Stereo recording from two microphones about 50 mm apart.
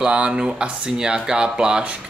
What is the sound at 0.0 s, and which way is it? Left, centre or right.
Speech, centre.